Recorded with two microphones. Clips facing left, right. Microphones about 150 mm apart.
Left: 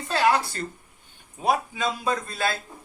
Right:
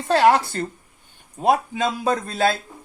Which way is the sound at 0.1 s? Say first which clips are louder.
Right 6 dB; 55° right (ahead or behind).